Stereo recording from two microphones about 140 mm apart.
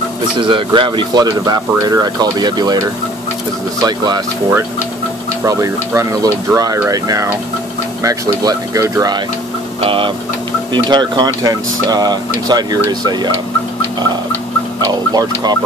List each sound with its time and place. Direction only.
0.4 s speech: 35° right (ahead or behind)
3.8 s speech: 30° right (ahead or behind)
5.4 s speech: 20° right (ahead or behind)
9.8 s speech: 40° right (ahead or behind)
14.9 s speech: 30° right (ahead or behind)